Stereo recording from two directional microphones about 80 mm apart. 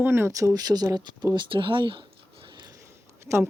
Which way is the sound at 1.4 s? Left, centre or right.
Right.